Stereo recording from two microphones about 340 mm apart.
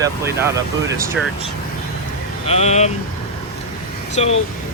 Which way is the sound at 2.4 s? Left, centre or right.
Centre.